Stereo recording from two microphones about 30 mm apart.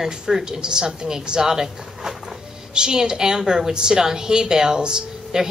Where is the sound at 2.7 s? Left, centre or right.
Right.